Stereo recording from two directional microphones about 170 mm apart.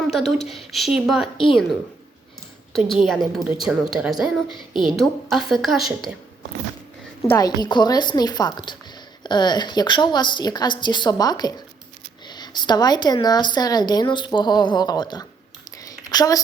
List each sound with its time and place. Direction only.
0.1 s a woman's voice: centre (ahead or behind)
2.7 s a woman's voice: centre (ahead or behind)
7.3 s a woman's voice: 20° left (ahead or behind)
15.8 s a sound: 20° left (ahead or behind)